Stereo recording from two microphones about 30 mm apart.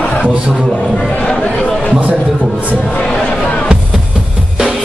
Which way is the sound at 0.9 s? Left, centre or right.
Centre.